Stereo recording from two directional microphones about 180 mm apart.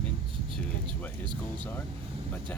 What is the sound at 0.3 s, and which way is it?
Vehicle, 30° right (ahead or behind).